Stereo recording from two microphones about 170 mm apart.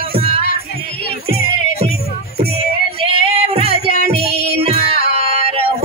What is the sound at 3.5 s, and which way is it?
Music, 35° right (ahead or behind).